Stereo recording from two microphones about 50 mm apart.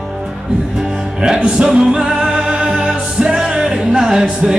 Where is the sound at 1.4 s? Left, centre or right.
Centre.